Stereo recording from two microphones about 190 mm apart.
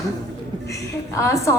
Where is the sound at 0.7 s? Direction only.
15° left (ahead or behind).